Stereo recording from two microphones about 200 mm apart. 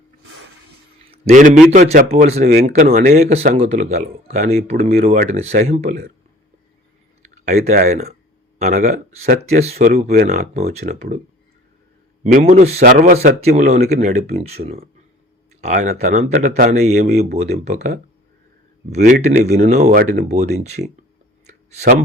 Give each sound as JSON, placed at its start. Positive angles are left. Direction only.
{"t": 1.1, "sound": "a man's voice", "side_deg": -35}
{"t": 5.9, "sound": "speech", "side_deg": -50}
{"t": 7.4, "sound": "speech", "side_deg": -35}
{"t": 12.2, "sound": "speech", "side_deg": -35}
{"t": 21.4, "sound": "a sound", "side_deg": -35}